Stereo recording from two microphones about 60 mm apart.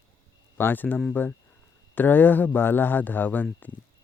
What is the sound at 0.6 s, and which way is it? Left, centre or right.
A man's voice, left.